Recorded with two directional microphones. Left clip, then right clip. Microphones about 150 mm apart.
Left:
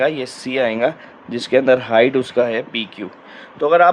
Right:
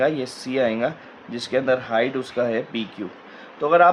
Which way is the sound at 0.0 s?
50° left (ahead or behind).